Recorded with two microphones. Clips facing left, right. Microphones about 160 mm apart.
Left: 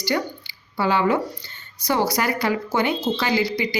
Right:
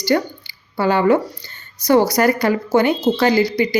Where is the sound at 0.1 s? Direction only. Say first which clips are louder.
Right 7 dB; 50° right (ahead or behind).